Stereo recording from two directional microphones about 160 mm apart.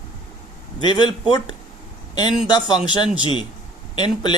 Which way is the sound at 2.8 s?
30° left (ahead or behind).